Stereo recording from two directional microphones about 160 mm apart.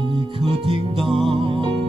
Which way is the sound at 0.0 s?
35° right (ahead or behind).